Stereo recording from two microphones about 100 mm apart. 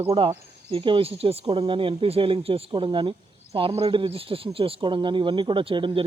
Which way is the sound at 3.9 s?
65° right (ahead or behind).